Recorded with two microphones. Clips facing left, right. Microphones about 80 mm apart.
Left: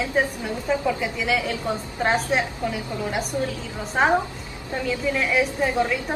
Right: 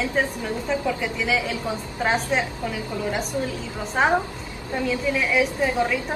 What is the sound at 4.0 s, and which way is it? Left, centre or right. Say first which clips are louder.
Speech: left 1 dB; centre.